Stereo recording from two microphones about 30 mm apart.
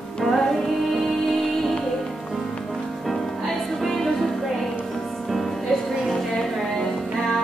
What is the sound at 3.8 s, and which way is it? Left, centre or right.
Music, centre.